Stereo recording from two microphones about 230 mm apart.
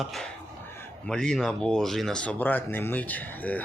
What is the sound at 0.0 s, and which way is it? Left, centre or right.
Speech, centre.